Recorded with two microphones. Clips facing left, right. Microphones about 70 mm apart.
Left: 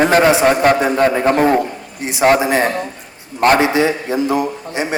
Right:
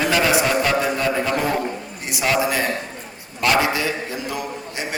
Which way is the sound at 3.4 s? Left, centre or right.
Left.